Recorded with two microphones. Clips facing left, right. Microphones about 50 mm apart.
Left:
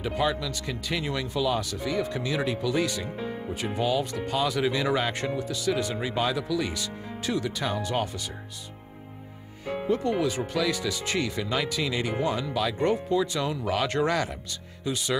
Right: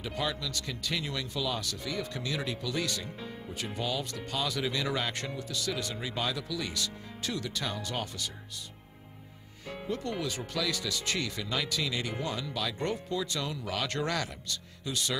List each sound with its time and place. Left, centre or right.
0.0 s speech: centre
9.7 s speech: centre